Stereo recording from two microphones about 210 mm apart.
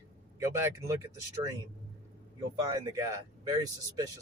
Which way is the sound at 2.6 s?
15° right (ahead or behind).